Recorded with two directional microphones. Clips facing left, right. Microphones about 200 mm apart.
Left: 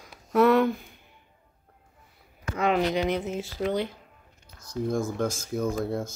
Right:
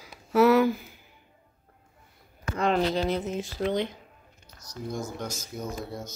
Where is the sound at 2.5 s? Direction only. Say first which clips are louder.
Left 1 dB; 5° left (ahead or behind).